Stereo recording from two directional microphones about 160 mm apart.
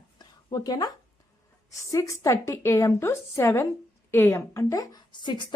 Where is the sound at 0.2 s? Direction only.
25° left (ahead or behind).